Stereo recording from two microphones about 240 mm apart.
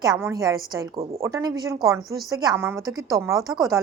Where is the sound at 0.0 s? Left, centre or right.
Centre.